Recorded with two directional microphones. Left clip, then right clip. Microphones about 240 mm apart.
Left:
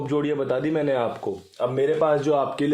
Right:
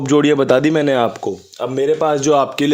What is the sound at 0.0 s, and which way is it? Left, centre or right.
A man's voice, right.